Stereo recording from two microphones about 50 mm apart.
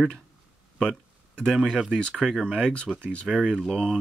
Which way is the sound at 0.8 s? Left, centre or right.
Centre.